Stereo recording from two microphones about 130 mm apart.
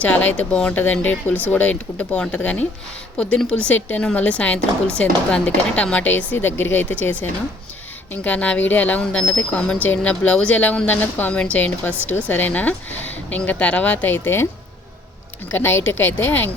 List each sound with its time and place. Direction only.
0.0 s speech: 10° left (ahead or behind)
15.5 s speech: 15° left (ahead or behind)